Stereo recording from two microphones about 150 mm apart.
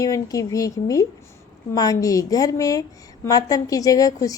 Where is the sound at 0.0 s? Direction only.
20° left (ahead or behind).